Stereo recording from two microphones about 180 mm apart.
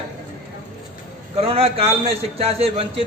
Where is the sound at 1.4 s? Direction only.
30° right (ahead or behind).